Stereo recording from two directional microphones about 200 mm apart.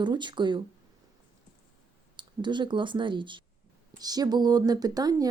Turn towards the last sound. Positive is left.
turn(degrees=-20)  # may be behind; listen again after turning